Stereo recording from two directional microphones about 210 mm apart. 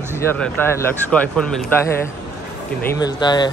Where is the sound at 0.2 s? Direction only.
10° left (ahead or behind).